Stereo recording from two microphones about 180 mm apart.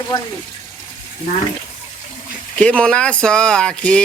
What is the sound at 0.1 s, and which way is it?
Speech, 25° left (ahead or behind).